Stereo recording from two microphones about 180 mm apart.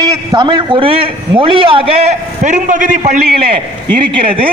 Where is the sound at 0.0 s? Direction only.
20° right (ahead or behind); by 3.4 s 45° right (ahead or behind).